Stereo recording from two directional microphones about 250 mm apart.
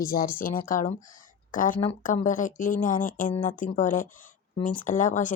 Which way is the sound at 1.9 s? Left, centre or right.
Left.